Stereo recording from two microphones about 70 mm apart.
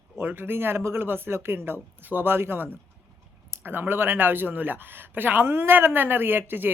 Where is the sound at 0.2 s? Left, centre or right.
Right.